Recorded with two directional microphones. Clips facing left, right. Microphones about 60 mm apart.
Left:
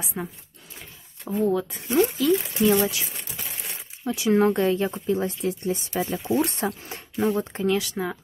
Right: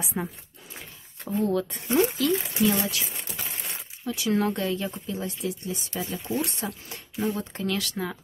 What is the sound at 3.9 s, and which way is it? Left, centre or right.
Speech, left.